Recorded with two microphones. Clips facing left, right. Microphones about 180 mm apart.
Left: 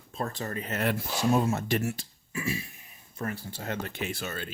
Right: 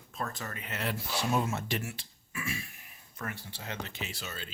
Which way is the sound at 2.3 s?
25° left (ahead or behind).